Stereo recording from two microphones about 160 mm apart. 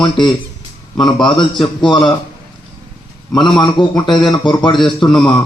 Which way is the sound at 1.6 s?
30° left (ahead or behind).